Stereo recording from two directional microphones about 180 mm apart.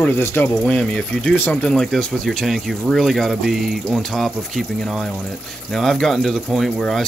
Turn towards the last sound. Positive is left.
turn(degrees=0)  # may be behind; listen again after turning